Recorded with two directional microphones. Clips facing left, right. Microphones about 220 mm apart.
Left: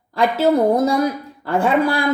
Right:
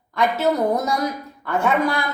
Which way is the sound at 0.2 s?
30° left (ahead or behind).